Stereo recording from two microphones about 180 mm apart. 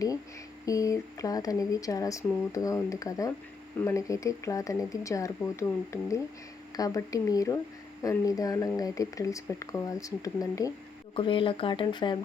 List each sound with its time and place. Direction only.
0.6 s speech: 20° left (ahead or behind)